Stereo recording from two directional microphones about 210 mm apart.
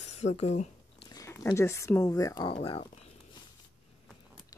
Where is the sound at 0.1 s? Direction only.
30° left (ahead or behind).